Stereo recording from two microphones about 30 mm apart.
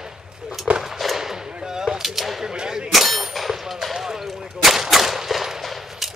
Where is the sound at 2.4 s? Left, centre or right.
Right.